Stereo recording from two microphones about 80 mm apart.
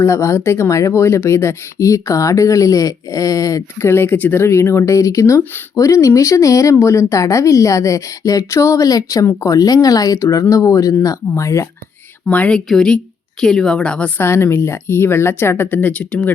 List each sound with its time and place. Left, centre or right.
0.0 s speech: left
12.3 s speech: centre
14.2 s speech: left